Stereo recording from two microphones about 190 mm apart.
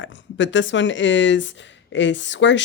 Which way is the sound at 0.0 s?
75° left (ahead or behind).